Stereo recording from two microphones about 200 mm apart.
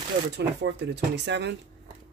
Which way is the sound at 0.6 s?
60° right (ahead or behind).